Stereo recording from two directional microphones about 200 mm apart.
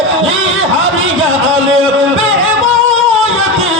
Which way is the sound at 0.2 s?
90° right.